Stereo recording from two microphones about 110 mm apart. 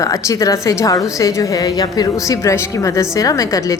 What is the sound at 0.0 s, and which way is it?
A woman's voice, 30° left (ahead or behind).